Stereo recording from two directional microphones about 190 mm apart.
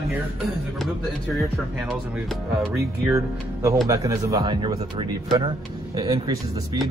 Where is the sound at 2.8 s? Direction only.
15° right (ahead or behind).